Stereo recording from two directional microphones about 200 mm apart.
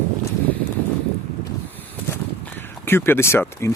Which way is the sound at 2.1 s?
10° left (ahead or behind).